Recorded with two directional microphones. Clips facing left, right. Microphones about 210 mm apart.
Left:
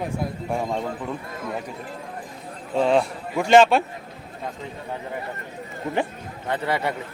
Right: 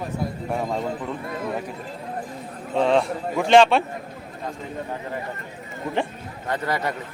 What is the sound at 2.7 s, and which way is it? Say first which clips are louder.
A man's voice: even; centre (ahead or behind).